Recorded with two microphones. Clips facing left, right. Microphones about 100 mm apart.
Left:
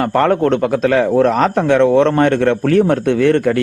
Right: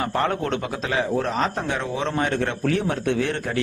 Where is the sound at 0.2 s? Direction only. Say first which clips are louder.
Left 12 dB; 55° left (ahead or behind).